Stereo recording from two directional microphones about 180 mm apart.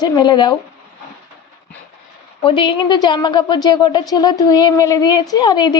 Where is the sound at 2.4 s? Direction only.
25° left (ahead or behind).